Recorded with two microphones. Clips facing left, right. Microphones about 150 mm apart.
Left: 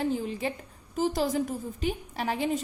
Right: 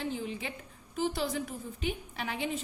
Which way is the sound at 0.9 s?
40° left (ahead or behind).